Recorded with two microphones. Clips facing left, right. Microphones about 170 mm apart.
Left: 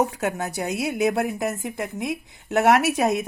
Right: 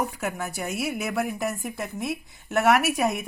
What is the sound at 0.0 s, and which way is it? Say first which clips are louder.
A woman's voice: left 5 dB; 20° left (ahead or behind).